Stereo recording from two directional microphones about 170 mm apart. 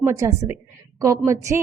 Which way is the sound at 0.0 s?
20° right (ahead or behind).